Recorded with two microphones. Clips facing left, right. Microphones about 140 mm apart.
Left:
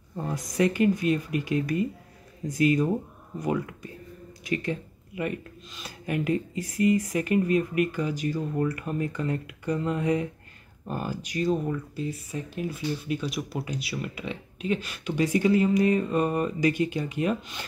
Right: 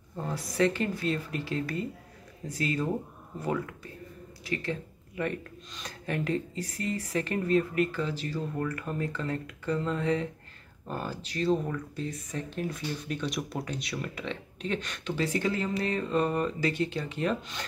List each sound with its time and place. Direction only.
0.2 s speech: 15° left (ahead or behind)